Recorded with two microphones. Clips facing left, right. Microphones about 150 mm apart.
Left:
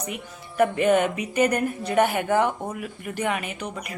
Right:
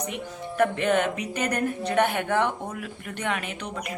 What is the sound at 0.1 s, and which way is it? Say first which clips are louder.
A woman's voice: right 3 dB; 5° left (ahead or behind).